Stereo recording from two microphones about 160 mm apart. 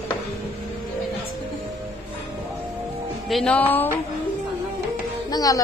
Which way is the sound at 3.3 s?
5° left (ahead or behind).